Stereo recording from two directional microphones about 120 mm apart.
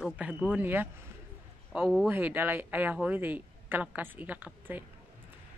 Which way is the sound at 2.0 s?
15° right (ahead or behind).